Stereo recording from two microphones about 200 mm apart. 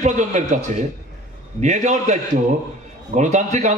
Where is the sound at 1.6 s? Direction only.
35° right (ahead or behind).